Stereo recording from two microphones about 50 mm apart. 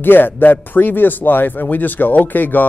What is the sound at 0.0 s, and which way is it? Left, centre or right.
Speech, left.